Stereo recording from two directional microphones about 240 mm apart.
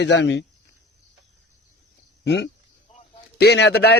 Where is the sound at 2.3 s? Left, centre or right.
Left.